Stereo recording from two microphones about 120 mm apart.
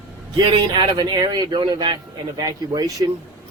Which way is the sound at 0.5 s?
40° right (ahead or behind).